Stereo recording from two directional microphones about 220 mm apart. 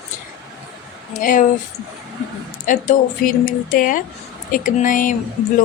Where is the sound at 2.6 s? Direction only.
35° left (ahead or behind).